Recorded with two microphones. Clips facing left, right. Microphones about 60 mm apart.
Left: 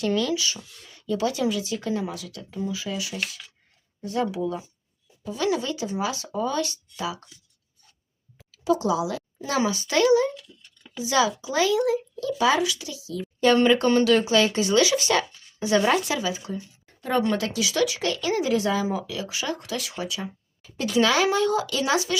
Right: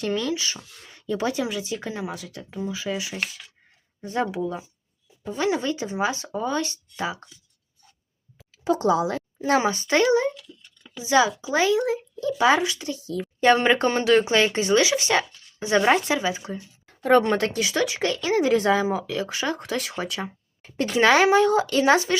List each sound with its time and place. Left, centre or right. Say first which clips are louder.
0.0 s speech: left 1 dB; right
2.0 s speech: right 1 dB; right
5.4 s speech: right 1 dB; right
8.6 s speech: right 2 dB; right
13.6 s speech: left 2 dB; right
17.0 s speech: right 5 dB; right